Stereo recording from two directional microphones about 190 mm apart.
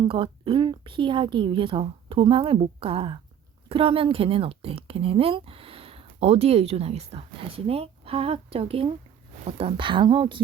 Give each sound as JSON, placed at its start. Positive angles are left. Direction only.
{"t": 0.0, "sound": "speech", "side_deg": -25}